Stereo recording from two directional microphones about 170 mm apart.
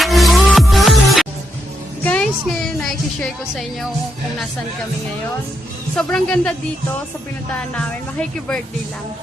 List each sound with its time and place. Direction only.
0.0 s music: centre (ahead or behind)
2.0 s speech: 5° left (ahead or behind)
6.0 s speech: 5° left (ahead or behind)
7.8 s speech: 5° left (ahead or behind)